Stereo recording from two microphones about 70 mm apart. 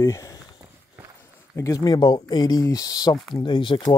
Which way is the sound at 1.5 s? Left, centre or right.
Left.